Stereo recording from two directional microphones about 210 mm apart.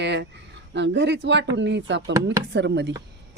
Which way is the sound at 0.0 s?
55° right (ahead or behind).